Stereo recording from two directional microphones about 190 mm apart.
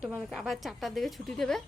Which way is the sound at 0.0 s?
5° right (ahead or behind).